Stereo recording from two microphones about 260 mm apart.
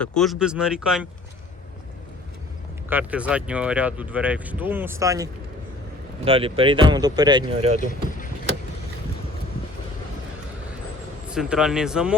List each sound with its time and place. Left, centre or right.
0.0 s speech: centre
2.9 s speech: centre; by 7.8 s right
7.8 s speech: left
11.3 s speech: centre